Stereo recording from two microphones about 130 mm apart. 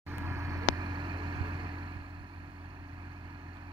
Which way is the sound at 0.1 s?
20° right (ahead or behind).